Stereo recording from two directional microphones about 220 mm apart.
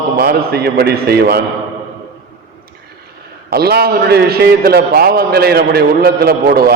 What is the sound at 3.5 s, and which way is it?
A man's voice, 45° right (ahead or behind).